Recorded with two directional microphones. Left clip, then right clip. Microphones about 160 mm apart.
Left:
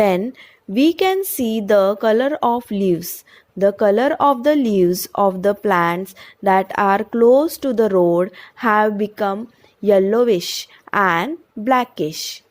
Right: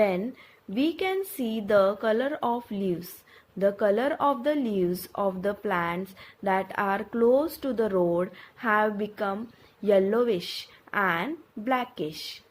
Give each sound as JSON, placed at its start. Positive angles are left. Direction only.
{"t": 0.7, "sound": "speech", "side_deg": 55}